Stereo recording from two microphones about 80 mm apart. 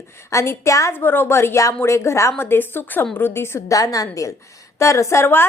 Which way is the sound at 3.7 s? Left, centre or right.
Left.